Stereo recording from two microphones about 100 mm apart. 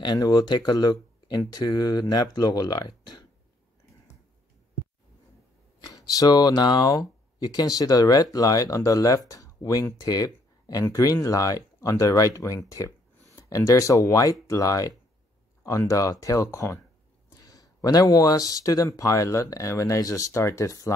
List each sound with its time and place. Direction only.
0.0 s speech: 40° left (ahead or behind)
5.8 s speech: 40° left (ahead or behind)